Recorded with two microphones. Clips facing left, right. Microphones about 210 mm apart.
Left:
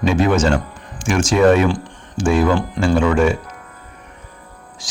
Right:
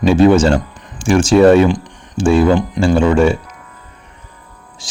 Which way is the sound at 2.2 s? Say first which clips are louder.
Right 4 dB; 30° right (ahead or behind).